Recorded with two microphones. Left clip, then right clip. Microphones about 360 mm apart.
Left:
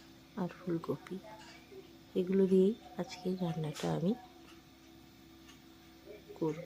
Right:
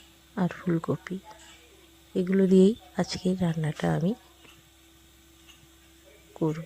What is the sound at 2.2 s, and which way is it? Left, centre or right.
Speech, centre.